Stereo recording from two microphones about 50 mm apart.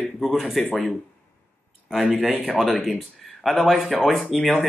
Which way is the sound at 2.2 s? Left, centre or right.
Right.